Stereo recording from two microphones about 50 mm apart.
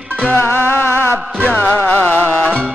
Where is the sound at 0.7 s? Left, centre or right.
Left.